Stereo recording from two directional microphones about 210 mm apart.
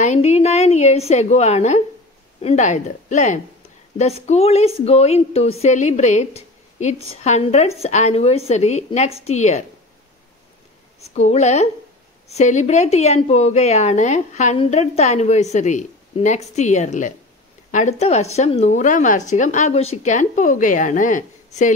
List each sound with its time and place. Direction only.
0.0 s a woman's voice: 35° left (ahead or behind)
11.0 s a woman's voice: 30° left (ahead or behind)